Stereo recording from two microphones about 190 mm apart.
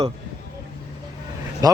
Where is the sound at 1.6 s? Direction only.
20° right (ahead or behind).